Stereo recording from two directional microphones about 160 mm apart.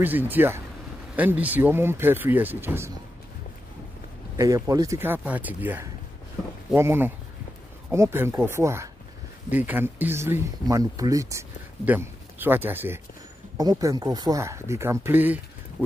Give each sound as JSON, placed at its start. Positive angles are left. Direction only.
{"t": 0.0, "sound": "speech", "side_deg": -10}
{"t": 4.4, "sound": "speech", "side_deg": -20}
{"t": 13.6, "sound": "speech", "side_deg": -25}